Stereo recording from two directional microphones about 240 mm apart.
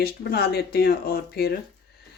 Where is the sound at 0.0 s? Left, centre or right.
Left.